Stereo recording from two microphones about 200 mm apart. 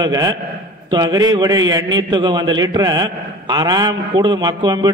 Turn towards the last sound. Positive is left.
turn(degrees=-20)  # may be behind; listen again after turning